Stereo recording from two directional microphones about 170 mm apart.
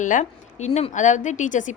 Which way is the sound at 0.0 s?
45° left (ahead or behind).